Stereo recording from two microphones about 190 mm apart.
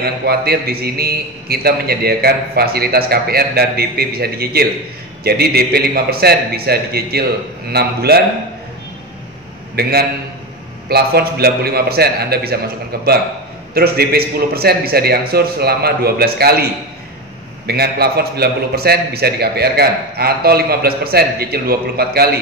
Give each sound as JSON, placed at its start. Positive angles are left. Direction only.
{"t": 0.0, "sound": "a man's voice", "side_deg": -55}
{"t": 9.8, "sound": "a man's voice", "side_deg": -55}
{"t": 17.6, "sound": "a man's voice", "side_deg": -55}